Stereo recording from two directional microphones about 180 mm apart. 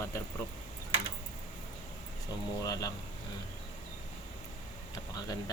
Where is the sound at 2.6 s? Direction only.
20° left (ahead or behind).